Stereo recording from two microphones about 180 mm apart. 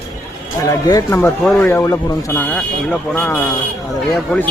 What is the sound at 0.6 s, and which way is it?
Speech, 20° left (ahead or behind).